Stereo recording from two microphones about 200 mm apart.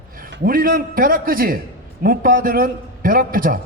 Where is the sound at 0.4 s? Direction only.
45° right (ahead or behind).